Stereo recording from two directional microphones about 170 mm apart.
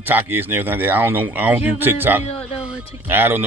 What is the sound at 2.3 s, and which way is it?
Speech, 35° left (ahead or behind).